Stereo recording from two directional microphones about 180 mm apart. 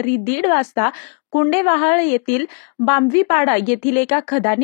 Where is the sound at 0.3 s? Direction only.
35° left (ahead or behind).